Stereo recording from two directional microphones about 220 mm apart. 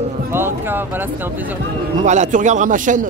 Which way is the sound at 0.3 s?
10° right (ahead or behind).